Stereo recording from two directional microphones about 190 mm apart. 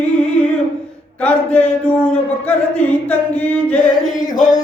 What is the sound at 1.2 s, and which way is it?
Singing, 5° left (ahead or behind).